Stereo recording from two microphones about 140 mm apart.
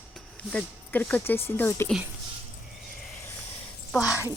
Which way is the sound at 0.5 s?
10° left (ahead or behind).